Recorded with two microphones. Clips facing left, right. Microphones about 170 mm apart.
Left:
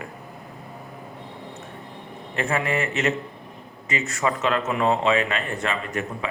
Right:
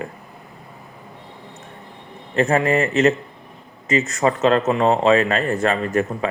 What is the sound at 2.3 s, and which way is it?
Speech, 40° right (ahead or behind).